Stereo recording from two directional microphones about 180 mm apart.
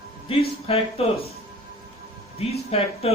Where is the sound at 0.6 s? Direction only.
35° left (ahead or behind).